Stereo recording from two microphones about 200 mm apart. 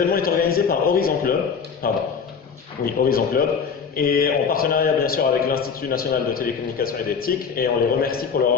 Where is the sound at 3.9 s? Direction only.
45° left (ahead or behind).